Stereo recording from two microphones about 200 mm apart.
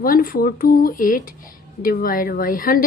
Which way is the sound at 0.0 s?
45° left (ahead or behind).